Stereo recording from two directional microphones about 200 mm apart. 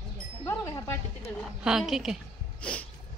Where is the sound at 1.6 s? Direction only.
Centre (ahead or behind).